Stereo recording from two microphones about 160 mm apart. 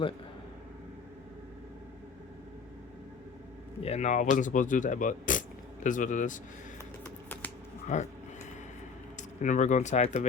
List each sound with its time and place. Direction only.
3.8 s speech: 45° left (ahead or behind)
7.9 s speech: 50° left (ahead or behind)
9.4 s speech: 50° left (ahead or behind)